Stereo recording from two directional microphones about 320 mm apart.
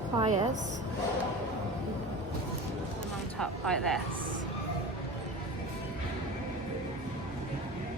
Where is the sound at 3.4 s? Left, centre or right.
Centre.